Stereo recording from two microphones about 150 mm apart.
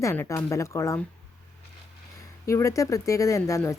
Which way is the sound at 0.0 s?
20° left (ahead or behind).